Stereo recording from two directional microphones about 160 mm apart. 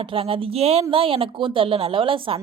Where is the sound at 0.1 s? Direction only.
35° right (ahead or behind).